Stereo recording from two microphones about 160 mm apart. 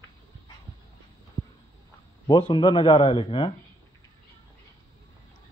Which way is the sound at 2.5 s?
30° left (ahead or behind).